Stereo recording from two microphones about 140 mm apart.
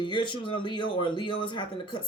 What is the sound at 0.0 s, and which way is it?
Speech, 35° left (ahead or behind).